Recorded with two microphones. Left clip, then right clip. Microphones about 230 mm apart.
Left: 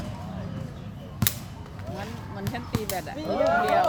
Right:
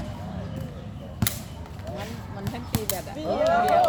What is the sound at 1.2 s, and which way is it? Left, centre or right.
Basketball bounce, left.